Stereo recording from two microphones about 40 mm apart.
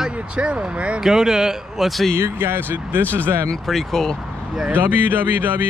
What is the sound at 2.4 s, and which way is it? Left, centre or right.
Speech, right.